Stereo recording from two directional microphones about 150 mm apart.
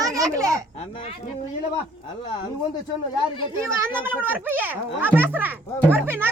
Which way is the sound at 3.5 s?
15° right (ahead or behind).